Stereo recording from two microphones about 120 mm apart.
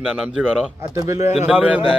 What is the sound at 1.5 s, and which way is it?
Speech, 10° right (ahead or behind).